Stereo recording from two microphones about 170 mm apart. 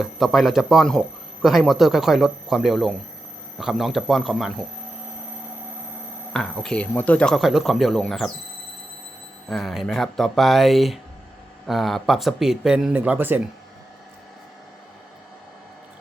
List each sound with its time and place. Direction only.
0.0 s speech: centre (ahead or behind)
6.3 s speech: 5° left (ahead or behind)
9.5 s speech: centre (ahead or behind)